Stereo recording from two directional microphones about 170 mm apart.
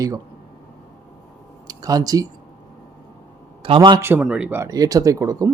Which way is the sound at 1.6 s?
20° right (ahead or behind).